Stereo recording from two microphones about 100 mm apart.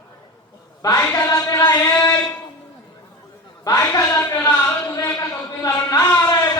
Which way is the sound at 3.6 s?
40° left (ahead or behind).